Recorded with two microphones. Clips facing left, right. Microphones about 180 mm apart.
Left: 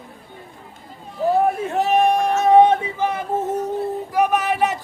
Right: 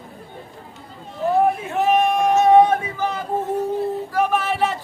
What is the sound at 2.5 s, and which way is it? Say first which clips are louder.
Yodeling: left 1 dB; 25° left (ahead or behind).